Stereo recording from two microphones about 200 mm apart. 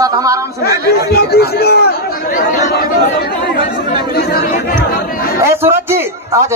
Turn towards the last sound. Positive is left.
turn(degrees=-10)  # may be behind; listen again after turning